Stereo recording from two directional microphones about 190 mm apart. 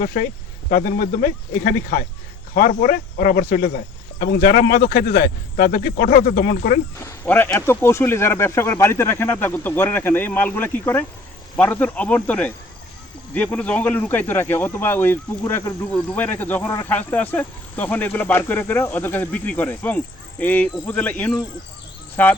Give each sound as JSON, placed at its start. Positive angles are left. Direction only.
{"t": 0.0, "sound": "speech", "side_deg": 50}
{"t": 7.0, "sound": "speech", "side_deg": 15}